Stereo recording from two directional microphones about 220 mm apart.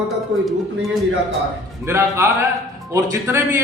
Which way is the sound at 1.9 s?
15° right (ahead or behind).